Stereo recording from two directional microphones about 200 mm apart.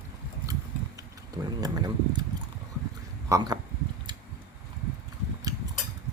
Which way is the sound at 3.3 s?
20° right (ahead or behind).